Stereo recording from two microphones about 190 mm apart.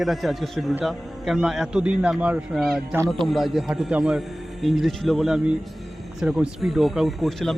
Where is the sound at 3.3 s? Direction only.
Centre (ahead or behind).